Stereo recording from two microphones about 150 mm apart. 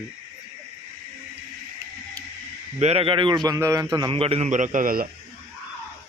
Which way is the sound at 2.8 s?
40° right (ahead or behind).